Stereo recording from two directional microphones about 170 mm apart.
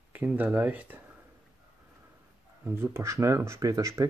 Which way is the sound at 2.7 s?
15° right (ahead or behind).